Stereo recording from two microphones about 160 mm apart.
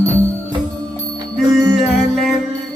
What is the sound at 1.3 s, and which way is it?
Music, centre (ahead or behind).